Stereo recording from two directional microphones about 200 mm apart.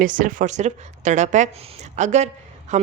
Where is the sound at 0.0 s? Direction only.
40° right (ahead or behind).